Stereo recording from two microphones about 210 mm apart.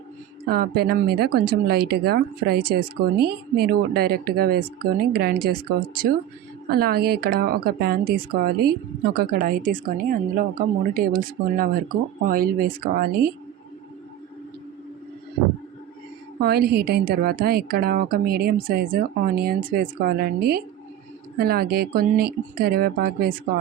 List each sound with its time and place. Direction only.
0.4 s a woman's voice: 45° right (ahead or behind)
16.4 s speech: 50° right (ahead or behind)